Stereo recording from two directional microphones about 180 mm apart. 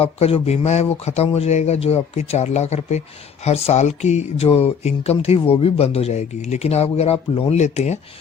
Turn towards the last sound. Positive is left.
turn(degrees=40)  # may be behind; listen again after turning